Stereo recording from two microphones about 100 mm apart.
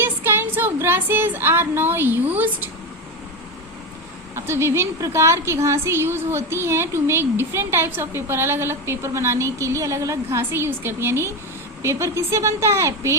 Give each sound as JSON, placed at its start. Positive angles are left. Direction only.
{"t": 0.0, "sound": "speech", "side_deg": -25}
{"t": 4.4, "sound": "a woman's voice", "side_deg": -25}